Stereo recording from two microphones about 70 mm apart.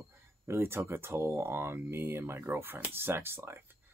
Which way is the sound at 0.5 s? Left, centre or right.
Right.